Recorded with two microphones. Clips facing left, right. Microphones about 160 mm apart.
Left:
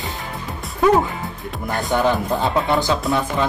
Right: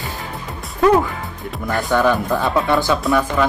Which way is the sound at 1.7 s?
20° left (ahead or behind).